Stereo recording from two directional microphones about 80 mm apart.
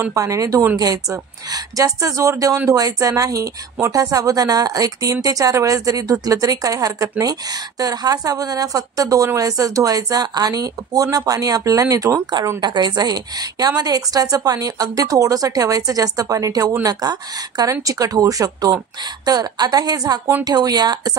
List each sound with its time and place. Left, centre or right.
0.1 s a woman's voice: right
12.5 s a woman's voice: right